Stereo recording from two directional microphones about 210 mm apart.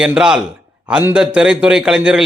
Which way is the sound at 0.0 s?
5° right (ahead or behind).